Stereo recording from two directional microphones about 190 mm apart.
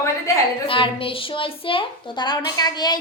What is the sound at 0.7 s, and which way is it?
A woman's voice, 30° left (ahead or behind).